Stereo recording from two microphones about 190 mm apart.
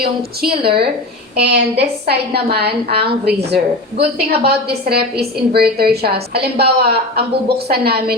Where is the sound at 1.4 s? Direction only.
60° right (ahead or behind).